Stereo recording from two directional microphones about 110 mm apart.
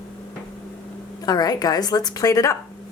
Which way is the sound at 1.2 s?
35° left (ahead or behind).